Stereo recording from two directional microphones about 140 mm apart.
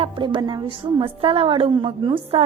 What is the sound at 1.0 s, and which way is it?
Speech, 40° right (ahead or behind).